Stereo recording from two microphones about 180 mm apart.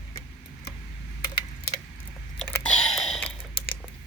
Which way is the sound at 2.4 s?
5° left (ahead or behind).